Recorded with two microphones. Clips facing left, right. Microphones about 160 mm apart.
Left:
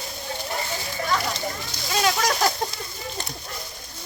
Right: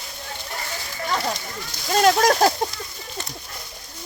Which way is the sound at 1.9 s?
50° right (ahead or behind).